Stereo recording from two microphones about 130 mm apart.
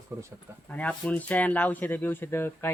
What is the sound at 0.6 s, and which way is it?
Speech, 10° left (ahead or behind).